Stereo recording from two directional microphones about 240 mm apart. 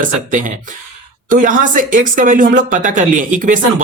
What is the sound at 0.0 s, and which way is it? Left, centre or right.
Speech, right.